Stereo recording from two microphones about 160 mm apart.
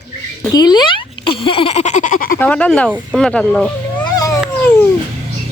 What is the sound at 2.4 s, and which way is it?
Speech, 10° left (ahead or behind).